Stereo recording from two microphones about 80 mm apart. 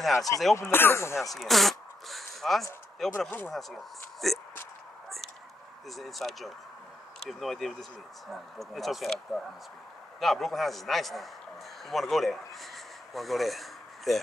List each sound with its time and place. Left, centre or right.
0.0 s speech: centre
0.6 s speech: left
1.1 s zipper: centre
3.0 s speech: centre
5.9 s speech: centre
11.8 s a sound: centre